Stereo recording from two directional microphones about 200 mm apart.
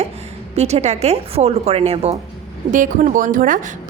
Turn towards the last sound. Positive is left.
turn(degrees=-45)  # may be behind; listen again after turning